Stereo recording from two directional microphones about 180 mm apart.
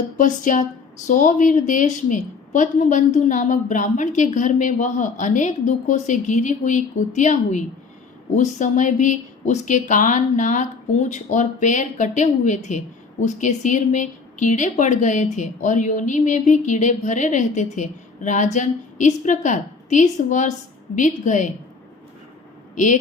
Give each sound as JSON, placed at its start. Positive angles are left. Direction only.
{"t": 0.2, "sound": "a woman's voice", "side_deg": 45}
{"t": 22.7, "sound": "speech", "side_deg": 45}